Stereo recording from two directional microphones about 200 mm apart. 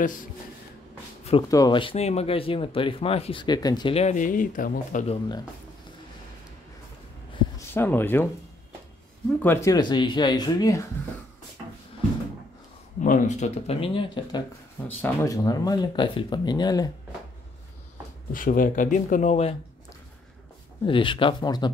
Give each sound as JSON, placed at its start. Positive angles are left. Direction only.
{"t": 1.5, "sound": "speech", "side_deg": 20}
{"t": 7.5, "sound": "speech", "side_deg": 10}
{"t": 9.4, "sound": "speech", "side_deg": 10}
{"t": 13.0, "sound": "speech", "side_deg": 40}
{"t": 14.9, "sound": "speech", "side_deg": 10}
{"t": 18.3, "sound": "speech", "side_deg": 45}
{"t": 20.8, "sound": "speech", "side_deg": 25}